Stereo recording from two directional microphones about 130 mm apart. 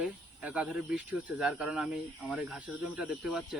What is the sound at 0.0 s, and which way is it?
Speech, 5° right (ahead or behind).